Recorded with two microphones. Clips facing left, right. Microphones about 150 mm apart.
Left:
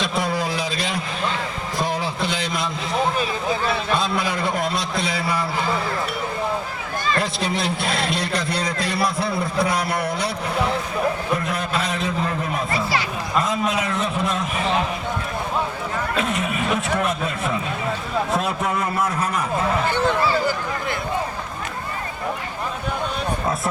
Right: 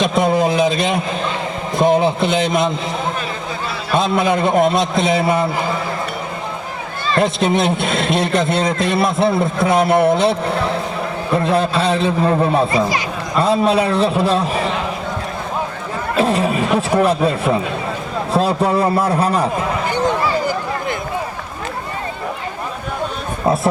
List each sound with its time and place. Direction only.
0.0 s a sound: 20° right (ahead or behind)
1.8 s a man's voice: 20° right (ahead or behind)
3.9 s a man's voice: 20° right (ahead or behind)
7.1 s a man's voice: 20° right (ahead or behind)
11.3 s a man's voice: 30° right (ahead or behind)
16.1 s speech: 30° right (ahead or behind)